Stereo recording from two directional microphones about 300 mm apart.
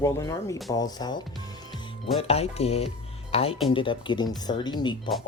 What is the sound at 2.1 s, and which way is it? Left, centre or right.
Speech, centre.